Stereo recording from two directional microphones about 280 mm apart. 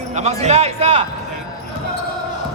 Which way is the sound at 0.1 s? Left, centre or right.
Right.